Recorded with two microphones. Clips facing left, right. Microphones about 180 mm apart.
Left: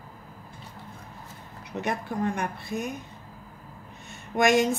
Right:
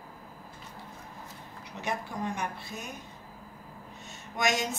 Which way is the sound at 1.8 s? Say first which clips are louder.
Left 5 dB; 55° left (ahead or behind).